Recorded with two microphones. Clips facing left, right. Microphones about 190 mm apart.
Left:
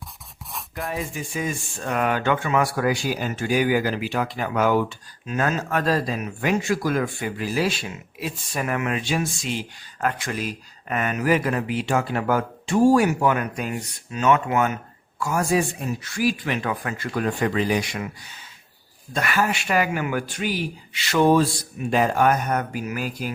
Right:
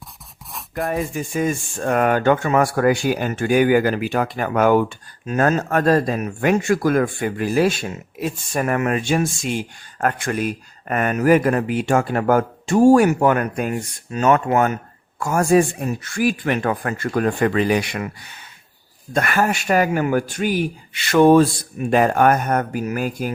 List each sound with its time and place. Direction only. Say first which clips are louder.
0.8 s speech: right 7 dB; 55° right (ahead or behind)